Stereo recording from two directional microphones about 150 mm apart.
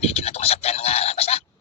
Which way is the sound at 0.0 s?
45° left (ahead or behind).